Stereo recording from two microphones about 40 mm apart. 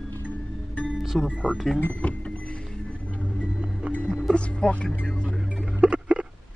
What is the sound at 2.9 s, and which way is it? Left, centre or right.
Music, left.